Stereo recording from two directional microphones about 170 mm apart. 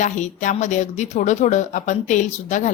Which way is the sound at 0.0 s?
45° left (ahead or behind).